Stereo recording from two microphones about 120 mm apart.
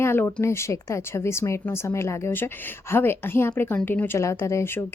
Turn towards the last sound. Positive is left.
turn(degrees=20)  # may be behind; listen again after turning